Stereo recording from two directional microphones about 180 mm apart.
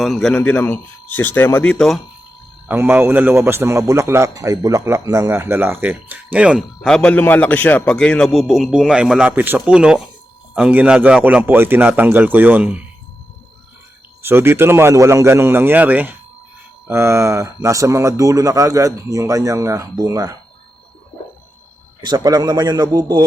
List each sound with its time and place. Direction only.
0.0 s speech: centre (ahead or behind)
2.6 s a man's voice: 10° right (ahead or behind)
14.2 s a man's voice: 15° right (ahead or behind)
22.0 s a man's voice: 20° right (ahead or behind)